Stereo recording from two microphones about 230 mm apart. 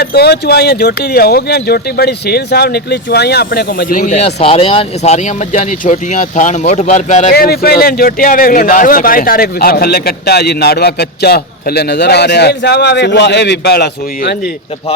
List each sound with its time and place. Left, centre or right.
0.0 s speech: left
7.3 s a man's voice: left